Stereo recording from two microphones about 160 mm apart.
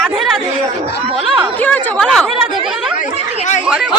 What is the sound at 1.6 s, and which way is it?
Speech, 10° left (ahead or behind).